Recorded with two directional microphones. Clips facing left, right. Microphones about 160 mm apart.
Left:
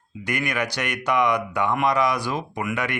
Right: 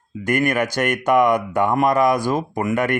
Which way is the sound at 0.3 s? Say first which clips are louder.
Right 7 dB; 50° right (ahead or behind).